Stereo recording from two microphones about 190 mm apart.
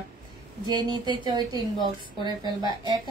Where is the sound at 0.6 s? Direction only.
25° right (ahead or behind).